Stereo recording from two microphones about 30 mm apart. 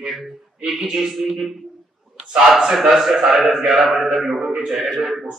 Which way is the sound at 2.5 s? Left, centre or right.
Centre.